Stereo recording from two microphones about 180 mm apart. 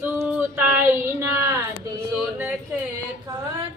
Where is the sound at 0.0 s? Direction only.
10° right (ahead or behind).